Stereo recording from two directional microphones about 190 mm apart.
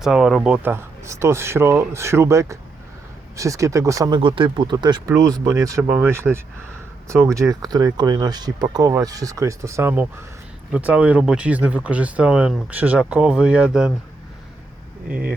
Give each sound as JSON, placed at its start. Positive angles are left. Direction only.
{"t": 0.0, "sound": "speech", "side_deg": 0}